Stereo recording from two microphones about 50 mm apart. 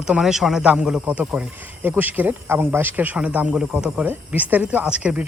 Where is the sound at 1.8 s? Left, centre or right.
Right.